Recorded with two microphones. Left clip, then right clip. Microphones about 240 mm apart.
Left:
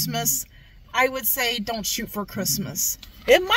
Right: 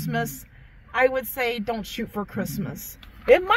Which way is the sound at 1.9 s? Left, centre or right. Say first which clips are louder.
Left 1 dB; left.